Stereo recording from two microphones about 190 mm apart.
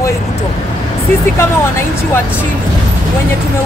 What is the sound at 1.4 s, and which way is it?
Speech, 15° left (ahead or behind).